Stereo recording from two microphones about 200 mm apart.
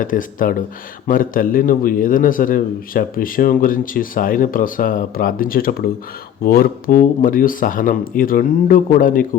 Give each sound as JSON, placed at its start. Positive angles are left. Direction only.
{"t": 0.0, "sound": "a man's voice", "side_deg": 40}